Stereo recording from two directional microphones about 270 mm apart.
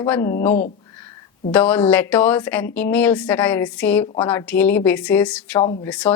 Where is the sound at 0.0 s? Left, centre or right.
Centre.